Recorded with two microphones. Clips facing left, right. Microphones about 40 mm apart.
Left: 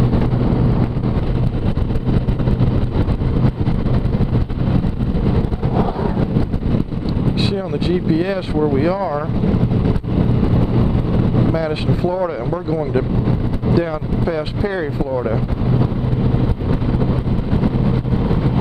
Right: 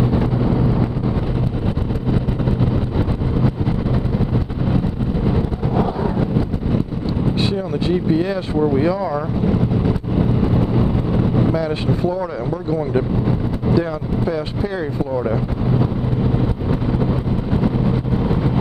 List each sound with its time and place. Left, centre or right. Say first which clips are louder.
0.1 s vehicle: even; centre
5.8 s vehicle: even; centre
7.3 s vehicle: left 1 dB; centre
11.3 s speech: left 1 dB; centre